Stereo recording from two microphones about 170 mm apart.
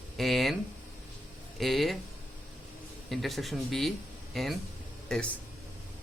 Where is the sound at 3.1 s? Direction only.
Centre (ahead or behind).